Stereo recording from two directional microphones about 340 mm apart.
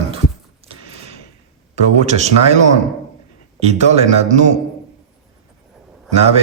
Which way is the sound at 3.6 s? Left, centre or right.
Centre.